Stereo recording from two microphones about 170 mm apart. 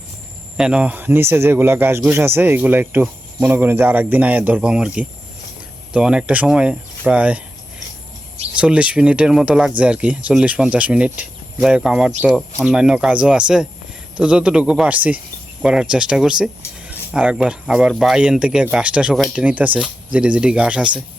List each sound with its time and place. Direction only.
0.5 s speech: 5° right (ahead or behind)
8.5 s speech: 5° right (ahead or behind)